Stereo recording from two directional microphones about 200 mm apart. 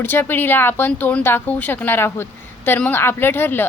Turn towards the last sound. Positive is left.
turn(degrees=10)  # may be behind; listen again after turning